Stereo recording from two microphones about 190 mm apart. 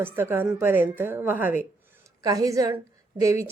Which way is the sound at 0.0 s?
10° right (ahead or behind).